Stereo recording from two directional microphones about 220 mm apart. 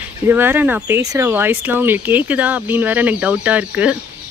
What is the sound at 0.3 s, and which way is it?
Speech, 10° right (ahead or behind).